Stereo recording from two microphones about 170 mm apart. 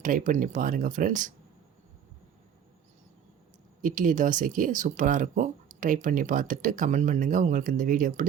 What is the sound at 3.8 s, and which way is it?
Speech, 50° right (ahead or behind).